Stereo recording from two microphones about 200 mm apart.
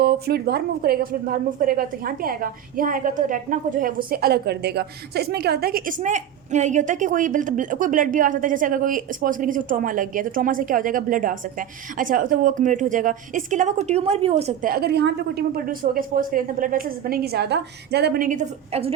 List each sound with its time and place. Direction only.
0.0 s a woman's voice: 50° right (ahead or behind); by 14.7 s 30° right (ahead or behind)
14.7 s a woman's voice: 50° right (ahead or behind); by 18.9 s 35° right (ahead or behind)